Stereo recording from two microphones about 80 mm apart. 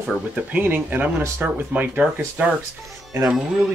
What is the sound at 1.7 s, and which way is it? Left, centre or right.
Speech, right.